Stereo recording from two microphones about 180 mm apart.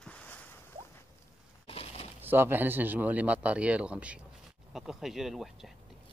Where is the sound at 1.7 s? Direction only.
30° left (ahead or behind).